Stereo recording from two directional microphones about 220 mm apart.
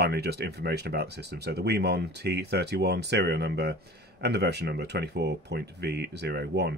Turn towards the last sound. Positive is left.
turn(degrees=-50)  # may be behind; listen again after turning